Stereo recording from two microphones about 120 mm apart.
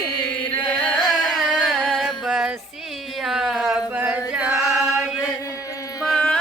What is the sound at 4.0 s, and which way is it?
Singing, 10° right (ahead or behind).